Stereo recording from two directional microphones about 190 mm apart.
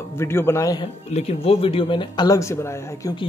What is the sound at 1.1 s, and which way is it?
A man's voice, 35° left (ahead or behind).